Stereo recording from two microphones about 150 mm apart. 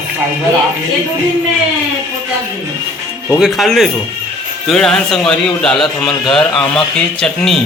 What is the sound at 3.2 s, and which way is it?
A man's voice, centre (ahead or behind).